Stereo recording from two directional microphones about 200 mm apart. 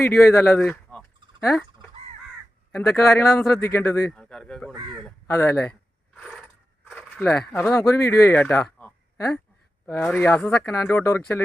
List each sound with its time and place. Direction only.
0.0 s speech: 15° left (ahead or behind)
0.6 s a sound: 5° left (ahead or behind)
1.5 s chicken: centre (ahead or behind)
2.7 s speech: 10° left (ahead or behind)
4.7 s speech: 20° right (ahead or behind)
5.0 s speech: 10° left (ahead or behind)
6.1 s coin: 5° left (ahead or behind)
7.2 s speech: 15° left (ahead or behind)